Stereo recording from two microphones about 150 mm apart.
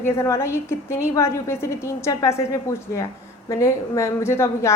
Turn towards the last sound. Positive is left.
turn(degrees=20)  # may be behind; listen again after turning